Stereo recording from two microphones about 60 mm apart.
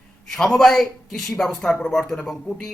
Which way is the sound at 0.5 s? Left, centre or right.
Centre.